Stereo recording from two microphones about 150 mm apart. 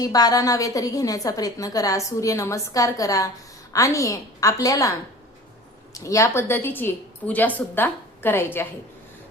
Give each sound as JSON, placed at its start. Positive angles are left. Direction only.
{"t": 0.0, "sound": "a woman's voice", "side_deg": 25}